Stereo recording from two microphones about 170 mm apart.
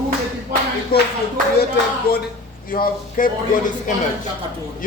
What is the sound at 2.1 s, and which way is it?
A man's voice, 65° left (ahead or behind).